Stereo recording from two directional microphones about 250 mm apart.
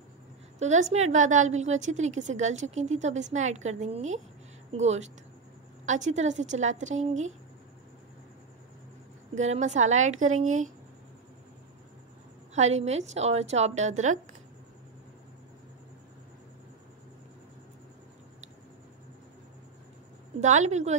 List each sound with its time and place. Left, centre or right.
0.6 s a woman's voice: right
9.4 s a woman's voice: right
12.5 s a woman's voice: right
20.3 s a woman's voice: right